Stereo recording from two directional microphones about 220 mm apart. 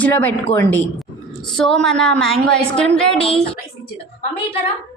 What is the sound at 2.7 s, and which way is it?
Speech, 25° left (ahead or behind).